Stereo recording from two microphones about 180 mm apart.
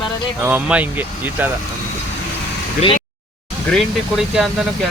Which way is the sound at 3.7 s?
Centre (ahead or behind).